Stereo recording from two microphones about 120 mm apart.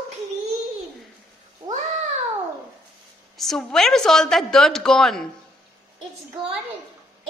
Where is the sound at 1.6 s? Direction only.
45° right (ahead or behind).